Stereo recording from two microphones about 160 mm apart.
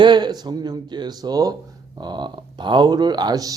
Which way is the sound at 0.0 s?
25° right (ahead or behind).